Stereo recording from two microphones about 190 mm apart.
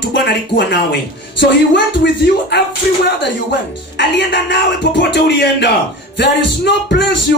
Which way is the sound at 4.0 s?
65° left (ahead or behind).